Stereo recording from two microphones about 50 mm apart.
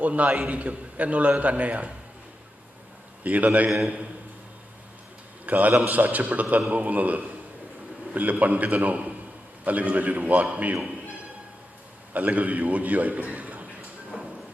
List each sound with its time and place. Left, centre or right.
0.0 s a man's voice: right
0.3 s a man's voice: centre
0.5 s a man's voice: right
3.2 s a man's voice: right
5.5 s a man's voice: right
12.1 s a man's voice: right